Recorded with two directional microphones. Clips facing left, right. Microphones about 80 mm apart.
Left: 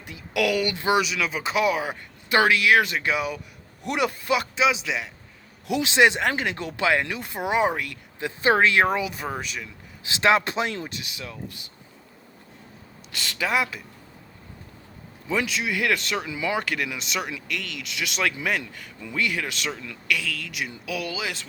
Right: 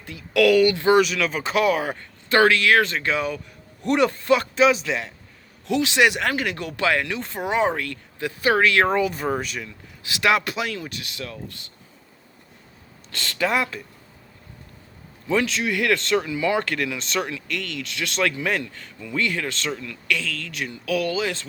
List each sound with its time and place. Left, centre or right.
0.0 s speech: centre
0.9 s a man's voice: centre
5.6 s speech: centre
8.2 s speech: left
8.9 s a man's voice: centre
10.0 s speech: left
13.1 s speech: centre
15.3 s speech: centre